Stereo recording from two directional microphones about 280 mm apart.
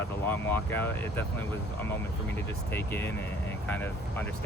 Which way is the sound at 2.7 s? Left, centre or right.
Centre.